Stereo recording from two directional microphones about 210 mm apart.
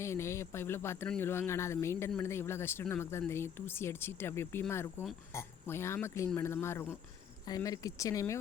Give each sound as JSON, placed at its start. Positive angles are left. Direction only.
{"t": 0.0, "sound": "speech", "side_deg": 15}